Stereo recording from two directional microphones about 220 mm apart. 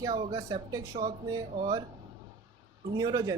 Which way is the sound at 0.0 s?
20° right (ahead or behind).